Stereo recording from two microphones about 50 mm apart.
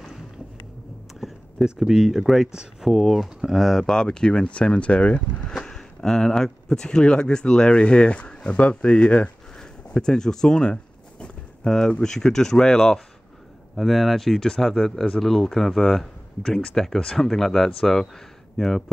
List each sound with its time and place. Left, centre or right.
1.2 s speech: centre
2.5 s speech: centre
2.9 s speech: centre
3.3 s speech: centre
3.8 s speech: centre
5.6 s speech: centre
9.9 s speech: centre
11.6 s speech: centre